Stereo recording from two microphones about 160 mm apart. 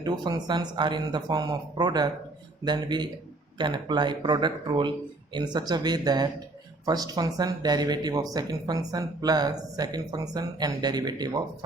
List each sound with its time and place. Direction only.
0.0 s speech: 25° right (ahead or behind)